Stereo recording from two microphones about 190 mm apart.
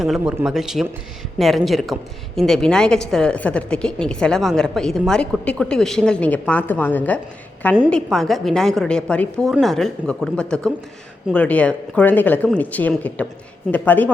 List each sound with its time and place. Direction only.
0.0 s a woman's voice: centre (ahead or behind)